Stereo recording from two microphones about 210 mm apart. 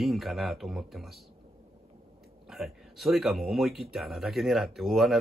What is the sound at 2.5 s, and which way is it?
Speech, centre (ahead or behind).